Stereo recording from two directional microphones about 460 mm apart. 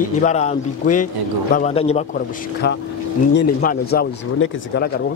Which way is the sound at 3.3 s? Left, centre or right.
Centre.